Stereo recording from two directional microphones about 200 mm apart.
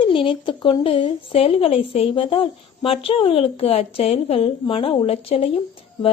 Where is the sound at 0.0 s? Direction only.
25° left (ahead or behind).